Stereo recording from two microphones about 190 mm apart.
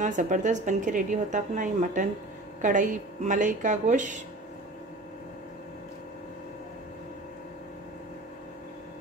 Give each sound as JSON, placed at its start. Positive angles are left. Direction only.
{"t": 0.0, "sound": "a woman's voice", "side_deg": -40}